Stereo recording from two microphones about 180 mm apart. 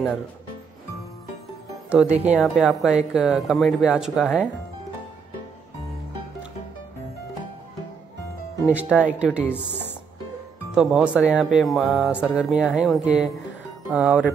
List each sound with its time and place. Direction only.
1.9 s speech: 5° right (ahead or behind)
8.6 s speech: 5° right (ahead or behind)
10.7 s speech: 5° right (ahead or behind)